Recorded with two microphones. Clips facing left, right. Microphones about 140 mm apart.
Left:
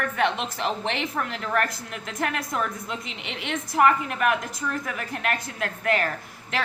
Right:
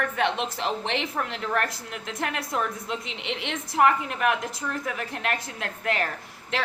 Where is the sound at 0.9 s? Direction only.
25° right (ahead or behind).